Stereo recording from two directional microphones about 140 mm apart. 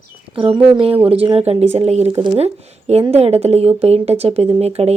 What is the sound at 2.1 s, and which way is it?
Speech, 35° right (ahead or behind).